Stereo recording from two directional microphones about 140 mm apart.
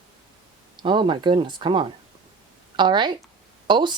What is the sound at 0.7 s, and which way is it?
Speech, 35° right (ahead or behind).